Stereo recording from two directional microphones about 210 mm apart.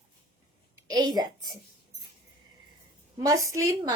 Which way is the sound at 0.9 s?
20° right (ahead or behind).